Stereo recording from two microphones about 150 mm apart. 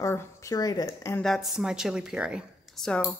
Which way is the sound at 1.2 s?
Centre (ahead or behind).